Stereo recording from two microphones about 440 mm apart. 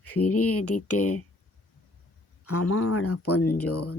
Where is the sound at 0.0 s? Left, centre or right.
Left.